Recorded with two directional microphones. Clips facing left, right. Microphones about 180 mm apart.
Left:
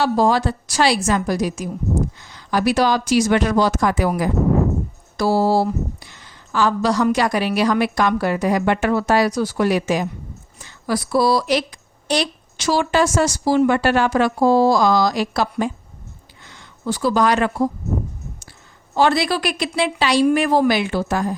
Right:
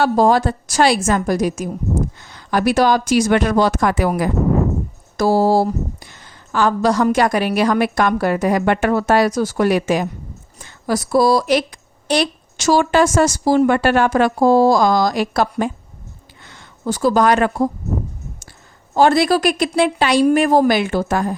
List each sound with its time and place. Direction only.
0.0 s a woman's voice: 50° right (ahead or behind)
5.1 s a woman's voice: 45° right (ahead or behind)
18.9 s a woman's voice: 50° right (ahead or behind)